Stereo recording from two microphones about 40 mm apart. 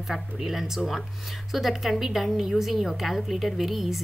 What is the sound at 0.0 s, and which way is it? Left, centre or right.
Speech, centre.